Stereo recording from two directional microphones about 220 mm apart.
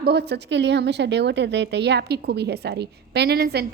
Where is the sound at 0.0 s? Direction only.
50° right (ahead or behind).